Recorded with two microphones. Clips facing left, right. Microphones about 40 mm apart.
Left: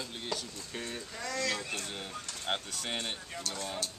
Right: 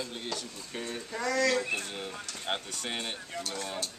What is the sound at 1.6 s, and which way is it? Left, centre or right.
Speech, centre.